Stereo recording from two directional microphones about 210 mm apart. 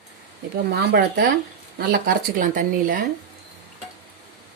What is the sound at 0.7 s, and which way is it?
Speech, 50° right (ahead or behind).